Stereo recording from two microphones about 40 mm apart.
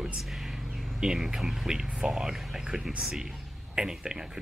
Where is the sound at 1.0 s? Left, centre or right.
Centre.